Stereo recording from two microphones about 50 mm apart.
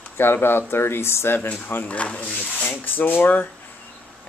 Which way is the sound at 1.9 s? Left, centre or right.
Left.